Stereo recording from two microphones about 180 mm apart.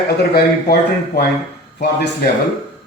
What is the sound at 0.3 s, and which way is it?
Speech, 60° left (ahead or behind).